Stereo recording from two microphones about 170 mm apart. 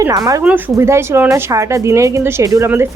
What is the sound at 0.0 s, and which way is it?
Speech, 20° right (ahead or behind).